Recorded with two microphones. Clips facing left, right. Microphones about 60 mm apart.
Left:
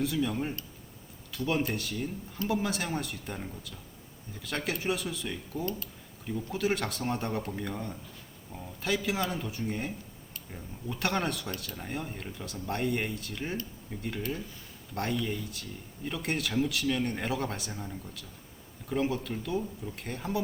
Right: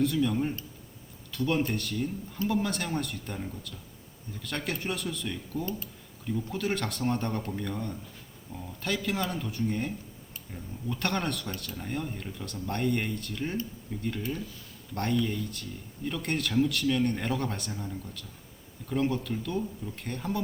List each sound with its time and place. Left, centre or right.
0.0 s speech: centre
14.9 s speech: centre